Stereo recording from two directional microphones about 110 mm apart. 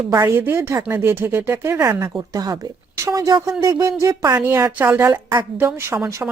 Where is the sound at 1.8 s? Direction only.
35° right (ahead or behind).